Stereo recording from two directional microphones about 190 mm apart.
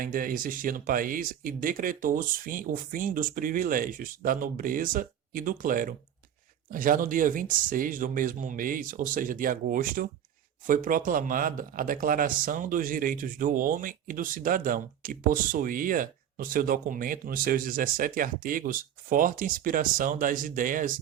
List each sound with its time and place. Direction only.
0.0 s speech: 45° right (ahead or behind)